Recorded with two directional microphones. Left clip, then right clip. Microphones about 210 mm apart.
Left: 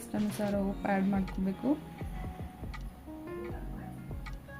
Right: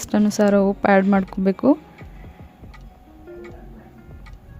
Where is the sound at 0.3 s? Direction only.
50° right (ahead or behind).